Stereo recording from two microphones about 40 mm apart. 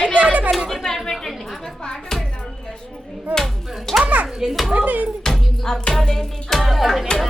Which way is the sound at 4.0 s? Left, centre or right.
Right.